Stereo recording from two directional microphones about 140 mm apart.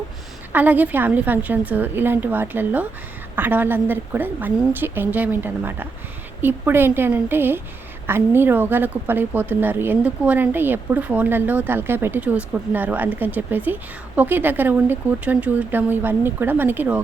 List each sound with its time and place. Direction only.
0.5 s a woman's voice: 10° right (ahead or behind)